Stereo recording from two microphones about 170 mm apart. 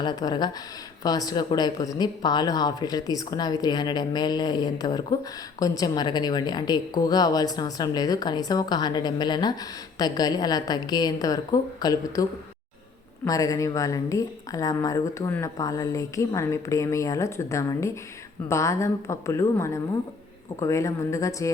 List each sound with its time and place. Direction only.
0.0 s a woman's voice: 25° left (ahead or behind)